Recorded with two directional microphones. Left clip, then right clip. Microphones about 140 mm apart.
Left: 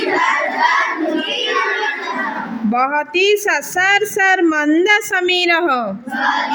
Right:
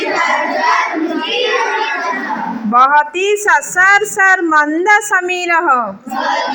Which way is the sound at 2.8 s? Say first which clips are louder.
Right 6 dB; 20° left (ahead or behind).